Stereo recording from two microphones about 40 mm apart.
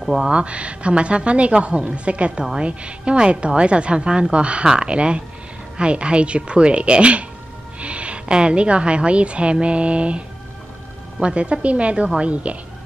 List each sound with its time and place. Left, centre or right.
0.3 s a woman's voice: right